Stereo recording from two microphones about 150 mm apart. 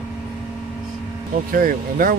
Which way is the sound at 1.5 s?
70° right (ahead or behind).